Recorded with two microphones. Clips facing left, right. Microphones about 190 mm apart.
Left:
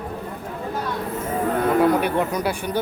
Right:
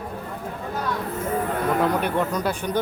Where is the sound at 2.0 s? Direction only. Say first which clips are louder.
Left 2 dB; 10° left (ahead or behind).